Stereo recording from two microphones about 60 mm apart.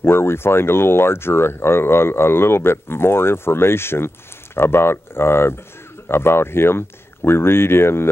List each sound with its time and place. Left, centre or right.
0.0 s speech: left